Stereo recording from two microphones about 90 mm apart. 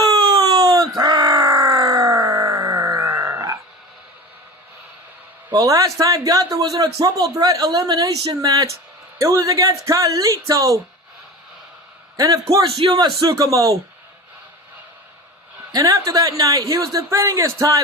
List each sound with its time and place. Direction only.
0.1 s a sound: 45° right (ahead or behind)
1.0 s grunt: 50° right (ahead or behind)
5.5 s a man's voice: 40° right (ahead or behind)
12.1 s a man's voice: 40° right (ahead or behind)
13.3 s a man's voice: 40° right (ahead or behind)
15.7 s a man's voice: 40° right (ahead or behind)